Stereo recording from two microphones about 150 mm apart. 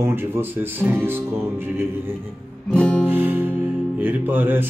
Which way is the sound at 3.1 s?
15° right (ahead or behind).